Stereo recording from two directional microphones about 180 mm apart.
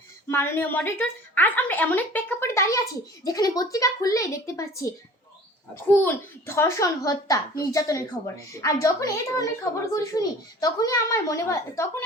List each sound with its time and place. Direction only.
0.3 s a woman's voice: 15° left (ahead or behind)